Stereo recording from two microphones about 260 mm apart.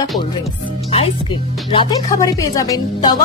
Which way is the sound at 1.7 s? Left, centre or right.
Centre.